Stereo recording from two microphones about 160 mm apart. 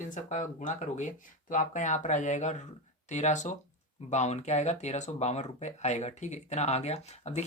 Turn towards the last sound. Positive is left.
turn(degrees=45)  # may be behind; listen again after turning